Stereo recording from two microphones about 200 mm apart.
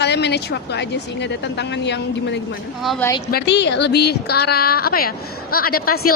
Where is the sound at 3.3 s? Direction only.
60° left (ahead or behind).